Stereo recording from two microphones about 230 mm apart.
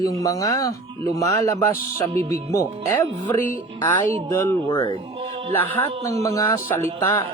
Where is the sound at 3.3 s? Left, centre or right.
Centre.